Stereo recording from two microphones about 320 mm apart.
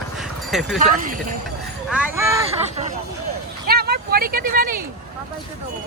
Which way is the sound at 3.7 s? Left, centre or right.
Right.